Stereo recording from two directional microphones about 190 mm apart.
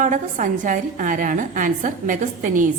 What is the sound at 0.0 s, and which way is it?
A woman's voice, 45° right (ahead or behind).